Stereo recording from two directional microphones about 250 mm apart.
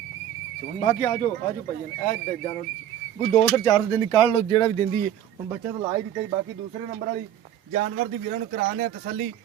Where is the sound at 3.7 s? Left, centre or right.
Centre.